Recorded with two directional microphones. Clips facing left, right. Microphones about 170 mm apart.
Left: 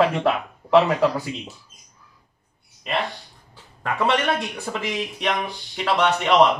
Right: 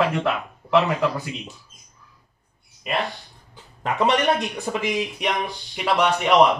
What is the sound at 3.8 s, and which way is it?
A man's voice, 20° right (ahead or behind).